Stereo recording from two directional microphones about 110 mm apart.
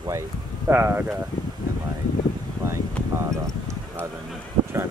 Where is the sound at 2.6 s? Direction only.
25° right (ahead or behind).